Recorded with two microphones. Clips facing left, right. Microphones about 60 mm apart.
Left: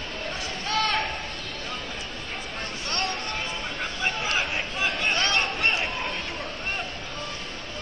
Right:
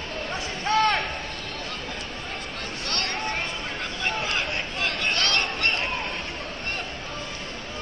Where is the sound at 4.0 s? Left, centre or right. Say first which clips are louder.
Left 1 dB; centre.